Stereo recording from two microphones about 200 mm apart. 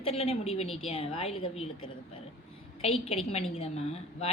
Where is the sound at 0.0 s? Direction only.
30° left (ahead or behind).